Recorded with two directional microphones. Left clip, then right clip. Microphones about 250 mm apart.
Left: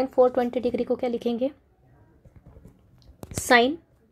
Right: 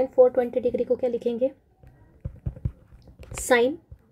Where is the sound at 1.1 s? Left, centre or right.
Left.